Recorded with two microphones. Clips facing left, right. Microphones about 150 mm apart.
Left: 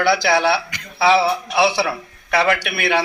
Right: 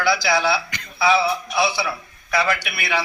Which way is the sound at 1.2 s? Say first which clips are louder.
Left 4 dB; 70° left (ahead or behind).